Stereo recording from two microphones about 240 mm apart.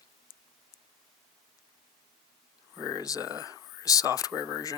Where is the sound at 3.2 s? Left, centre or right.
Centre.